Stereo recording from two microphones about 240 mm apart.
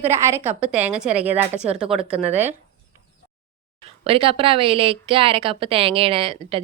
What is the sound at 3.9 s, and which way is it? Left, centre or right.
Speech, right.